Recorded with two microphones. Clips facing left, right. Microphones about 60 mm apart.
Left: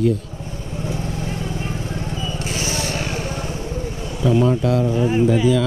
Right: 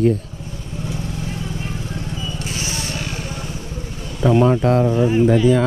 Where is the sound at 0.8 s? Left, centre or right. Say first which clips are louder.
Left 1 dB; left.